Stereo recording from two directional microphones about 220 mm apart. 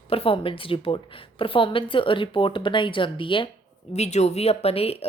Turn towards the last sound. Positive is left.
turn(degrees=25)  # may be behind; listen again after turning